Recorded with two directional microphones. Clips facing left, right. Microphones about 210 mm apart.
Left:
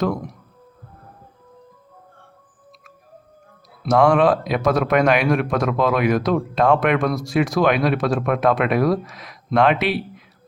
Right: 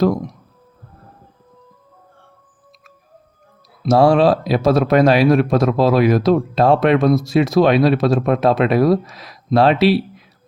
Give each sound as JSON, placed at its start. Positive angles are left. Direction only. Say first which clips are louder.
{"t": 3.8, "sound": "a man's voice", "louder": "right 3 dB", "side_deg": -30}